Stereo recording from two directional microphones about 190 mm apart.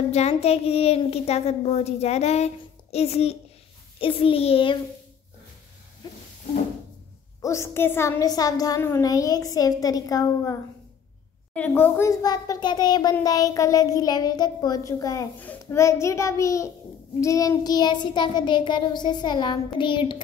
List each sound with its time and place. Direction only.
0.1 s a child's voice: 35° left (ahead or behind)
4.0 s child singing: 30° left (ahead or behind)
7.4 s a child's voice: 15° left (ahead or behind)
17.2 s child singing: 15° left (ahead or behind)